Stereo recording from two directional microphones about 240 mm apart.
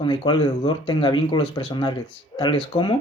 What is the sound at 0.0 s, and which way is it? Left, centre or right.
Speech, left.